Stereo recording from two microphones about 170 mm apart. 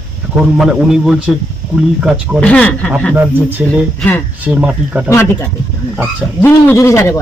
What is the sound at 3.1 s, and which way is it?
Speech, 10° right (ahead or behind).